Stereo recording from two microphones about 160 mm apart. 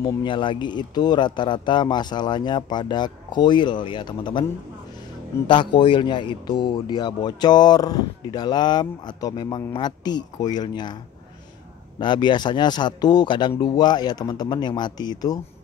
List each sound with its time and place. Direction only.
0.0 s speech: 30° left (ahead or behind)
5.5 s speech: 30° left (ahead or behind)
12.0 s speech: 30° left (ahead or behind)